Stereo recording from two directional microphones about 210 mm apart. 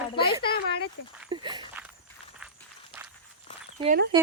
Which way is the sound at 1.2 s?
20° right (ahead or behind).